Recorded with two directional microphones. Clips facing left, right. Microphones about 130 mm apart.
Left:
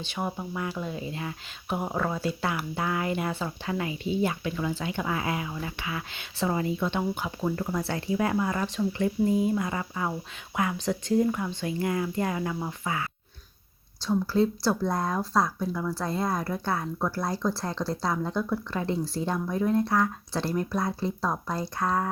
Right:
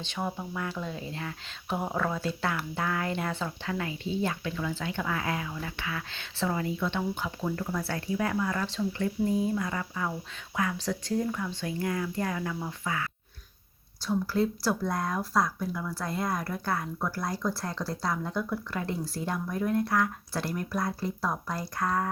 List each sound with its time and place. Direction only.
0.0 s speech: 10° left (ahead or behind); by 22.0 s 25° left (ahead or behind)